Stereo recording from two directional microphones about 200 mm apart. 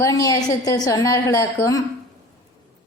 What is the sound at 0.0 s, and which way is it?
A woman's voice, 15° left (ahead or behind).